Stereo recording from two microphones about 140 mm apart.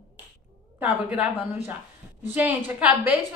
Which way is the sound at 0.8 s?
10° right (ahead or behind).